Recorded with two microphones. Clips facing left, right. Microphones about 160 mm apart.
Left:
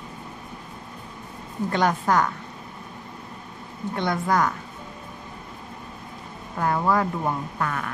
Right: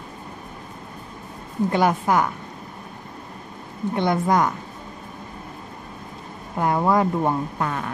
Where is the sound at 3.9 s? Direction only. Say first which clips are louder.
Right 3 dB; 20° right (ahead or behind).